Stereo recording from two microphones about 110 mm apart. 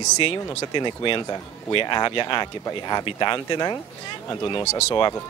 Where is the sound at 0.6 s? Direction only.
50° left (ahead or behind).